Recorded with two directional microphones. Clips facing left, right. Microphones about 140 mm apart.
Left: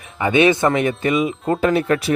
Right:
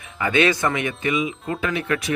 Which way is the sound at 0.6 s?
35° left (ahead or behind).